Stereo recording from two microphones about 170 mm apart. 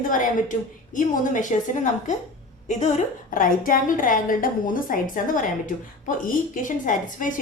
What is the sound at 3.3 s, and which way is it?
A woman's voice, 55° left (ahead or behind).